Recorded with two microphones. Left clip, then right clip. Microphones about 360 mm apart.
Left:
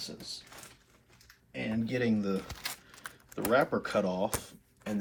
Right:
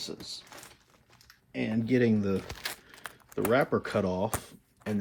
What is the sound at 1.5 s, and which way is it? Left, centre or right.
Speech, centre.